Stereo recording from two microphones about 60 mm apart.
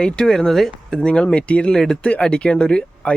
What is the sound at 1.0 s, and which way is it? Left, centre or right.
Speech, centre.